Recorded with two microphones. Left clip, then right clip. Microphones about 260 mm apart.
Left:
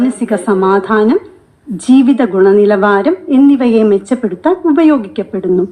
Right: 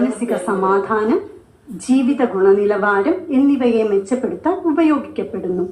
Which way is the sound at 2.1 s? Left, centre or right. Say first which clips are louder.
Left 5 dB; left.